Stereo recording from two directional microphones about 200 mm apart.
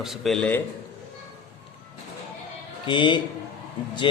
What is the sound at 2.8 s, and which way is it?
Speech, 25° left (ahead or behind).